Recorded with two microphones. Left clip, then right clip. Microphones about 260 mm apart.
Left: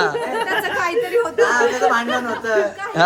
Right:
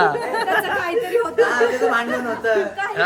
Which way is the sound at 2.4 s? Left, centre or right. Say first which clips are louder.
Right 2 dB; left.